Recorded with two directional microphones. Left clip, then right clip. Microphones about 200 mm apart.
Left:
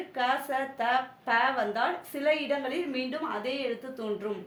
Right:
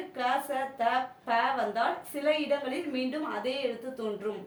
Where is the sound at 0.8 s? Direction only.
30° left (ahead or behind).